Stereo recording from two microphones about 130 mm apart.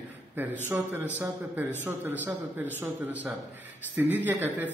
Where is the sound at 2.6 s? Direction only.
15° right (ahead or behind).